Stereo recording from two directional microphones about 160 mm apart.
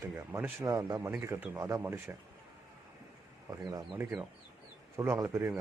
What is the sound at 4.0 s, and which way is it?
Speech, 15° right (ahead or behind).